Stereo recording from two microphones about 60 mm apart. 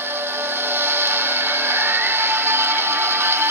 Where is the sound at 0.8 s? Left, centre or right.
Right.